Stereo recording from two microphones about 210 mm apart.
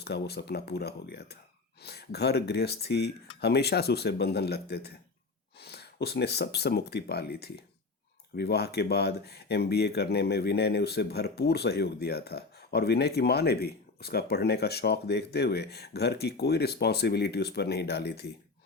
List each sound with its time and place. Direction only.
0.0 s speech: 50° left (ahead or behind)